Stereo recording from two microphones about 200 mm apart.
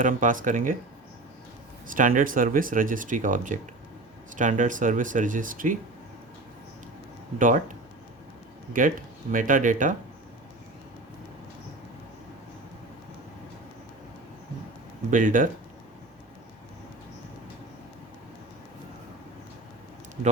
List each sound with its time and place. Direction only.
0.0 s speech: 40° right (ahead or behind)
1.9 s speech: 40° right (ahead or behind)
7.3 s speech: 40° right (ahead or behind)
9.3 s speech: 40° right (ahead or behind)
15.1 s speech: 40° right (ahead or behind)